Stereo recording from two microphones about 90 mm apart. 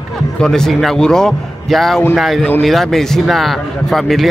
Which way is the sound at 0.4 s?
5° left (ahead or behind).